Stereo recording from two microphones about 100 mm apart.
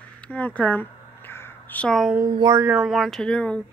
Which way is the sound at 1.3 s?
20° left (ahead or behind).